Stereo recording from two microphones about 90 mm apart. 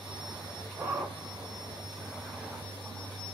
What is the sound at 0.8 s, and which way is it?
Vehicle, 25° right (ahead or behind).